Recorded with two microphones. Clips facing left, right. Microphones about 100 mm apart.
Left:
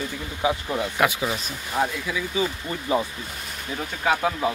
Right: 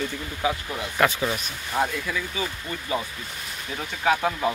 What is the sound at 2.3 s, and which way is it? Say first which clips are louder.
Speech: left 4 dB; 20° left (ahead or behind).